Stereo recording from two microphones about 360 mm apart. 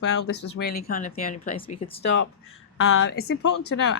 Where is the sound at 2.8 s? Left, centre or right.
Left.